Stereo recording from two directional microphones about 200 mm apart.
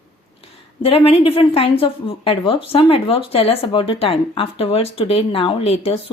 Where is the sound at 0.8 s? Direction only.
30° left (ahead or behind).